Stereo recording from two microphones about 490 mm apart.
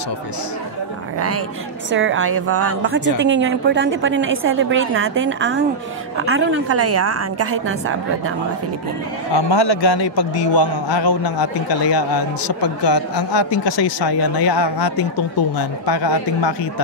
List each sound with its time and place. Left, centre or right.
1.9 s a woman's voice: right
9.3 s a man's voice: left